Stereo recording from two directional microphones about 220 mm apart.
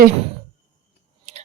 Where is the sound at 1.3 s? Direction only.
30° right (ahead or behind).